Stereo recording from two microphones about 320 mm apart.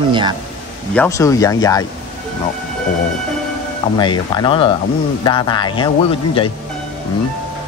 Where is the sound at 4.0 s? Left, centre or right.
Centre.